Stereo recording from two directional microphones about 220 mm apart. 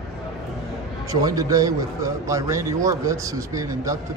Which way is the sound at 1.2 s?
15° right (ahead or behind).